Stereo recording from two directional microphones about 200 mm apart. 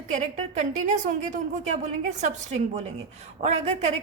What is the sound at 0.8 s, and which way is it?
A woman's voice, 40° right (ahead or behind).